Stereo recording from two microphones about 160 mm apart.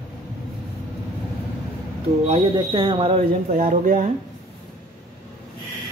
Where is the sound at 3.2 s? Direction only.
55° right (ahead or behind).